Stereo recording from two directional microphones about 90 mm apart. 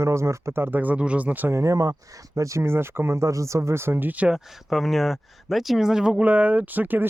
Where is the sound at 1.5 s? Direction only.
35° right (ahead or behind); by 4.4 s 15° right (ahead or behind).